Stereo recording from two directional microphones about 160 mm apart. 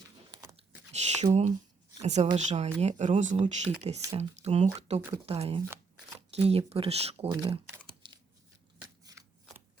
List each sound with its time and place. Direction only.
0.5 s a sound: 40° right (ahead or behind)
2.0 s speech: 45° right (ahead or behind)
7.3 s speech: 25° right (ahead or behind)
8.0 s shuffling cards: 30° right (ahead or behind)